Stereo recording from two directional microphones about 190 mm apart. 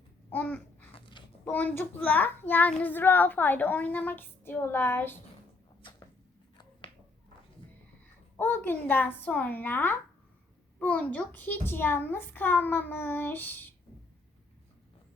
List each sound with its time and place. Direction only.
0.3 s babbling: 10° left (ahead or behind)
0.9 s a sound: 25° left (ahead or behind)
1.5 s a child's voice: 10° left (ahead or behind)
8.4 s a child's voice: 10° left (ahead or behind)